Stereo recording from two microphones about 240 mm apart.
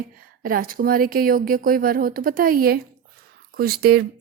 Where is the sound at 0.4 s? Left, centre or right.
Right.